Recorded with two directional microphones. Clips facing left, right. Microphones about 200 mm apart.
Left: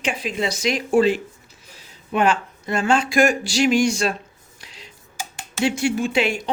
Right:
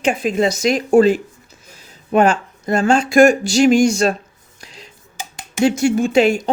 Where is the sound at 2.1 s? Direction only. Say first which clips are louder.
Right 5 dB; 45° right (ahead or behind).